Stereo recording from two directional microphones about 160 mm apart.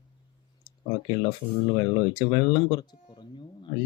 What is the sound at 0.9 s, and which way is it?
Speech, 30° left (ahead or behind).